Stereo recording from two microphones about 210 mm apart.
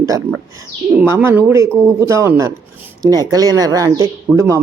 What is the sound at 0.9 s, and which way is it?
Speech, 10° right (ahead or behind).